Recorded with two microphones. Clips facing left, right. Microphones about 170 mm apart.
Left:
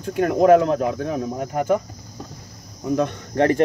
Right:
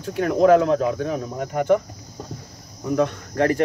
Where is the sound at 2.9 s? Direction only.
25° left (ahead or behind).